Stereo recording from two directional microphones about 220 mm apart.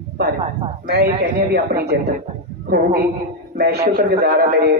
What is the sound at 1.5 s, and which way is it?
Speech, 45° right (ahead or behind).